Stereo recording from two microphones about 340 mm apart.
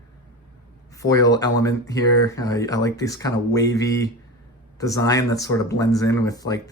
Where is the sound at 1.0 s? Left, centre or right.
Centre.